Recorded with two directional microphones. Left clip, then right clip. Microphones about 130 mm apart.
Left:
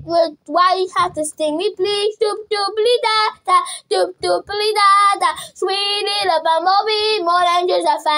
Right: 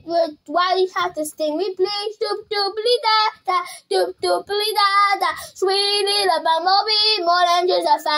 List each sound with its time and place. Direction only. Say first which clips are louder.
0.1 s child singing: left 4 dB; 15° left (ahead or behind); by 2.1 s 35° left (ahead or behind)
2.1 s child singing: left 4 dB; 15° left (ahead or behind)
5.0 s child singing: left 3 dB; 35° left (ahead or behind)
5.7 s child singing: even; 20° left (ahead or behind)